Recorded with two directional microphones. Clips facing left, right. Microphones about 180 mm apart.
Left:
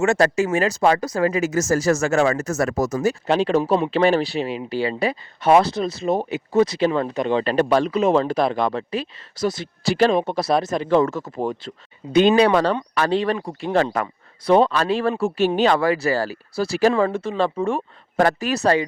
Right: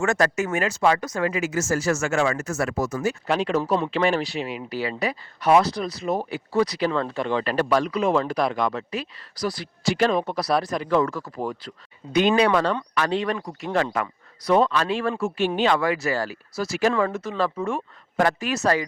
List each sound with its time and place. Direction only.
0.0 s speech: 25° left (ahead or behind)
3.2 s speech: 30° left (ahead or behind)
9.8 s speech: 35° left (ahead or behind)